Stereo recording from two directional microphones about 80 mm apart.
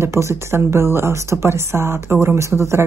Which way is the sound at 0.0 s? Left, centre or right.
Right.